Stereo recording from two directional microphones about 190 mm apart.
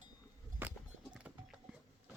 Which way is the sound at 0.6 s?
5° right (ahead or behind).